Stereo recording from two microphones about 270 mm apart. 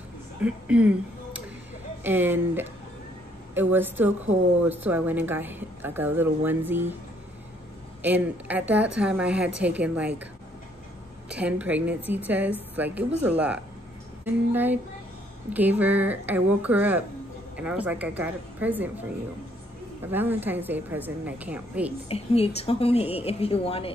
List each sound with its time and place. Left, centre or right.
0.4 s a woman's voice: centre
8.0 s a woman's voice: centre
11.2 s a woman's voice: centre
20.1 s a woman's voice: centre
22.0 s a woman's voice: left